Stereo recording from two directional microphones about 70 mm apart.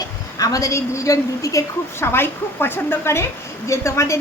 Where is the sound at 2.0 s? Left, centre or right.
Left.